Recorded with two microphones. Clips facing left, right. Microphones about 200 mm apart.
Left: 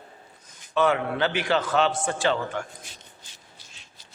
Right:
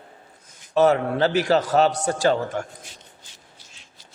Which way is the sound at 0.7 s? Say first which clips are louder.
Right 5 dB; 40° right (ahead or behind).